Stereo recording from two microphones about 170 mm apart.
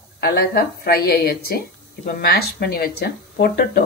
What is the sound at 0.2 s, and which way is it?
A woman's voice, 65° left (ahead or behind).